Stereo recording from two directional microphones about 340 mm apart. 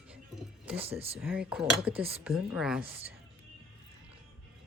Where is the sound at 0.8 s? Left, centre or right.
Centre.